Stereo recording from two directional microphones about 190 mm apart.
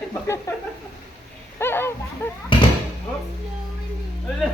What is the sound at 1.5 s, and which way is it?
Speech, 10° left (ahead or behind).